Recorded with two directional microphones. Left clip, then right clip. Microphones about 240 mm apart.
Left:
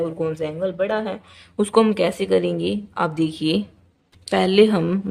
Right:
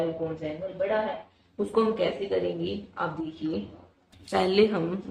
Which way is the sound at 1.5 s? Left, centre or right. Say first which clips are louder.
Left 8 dB; left.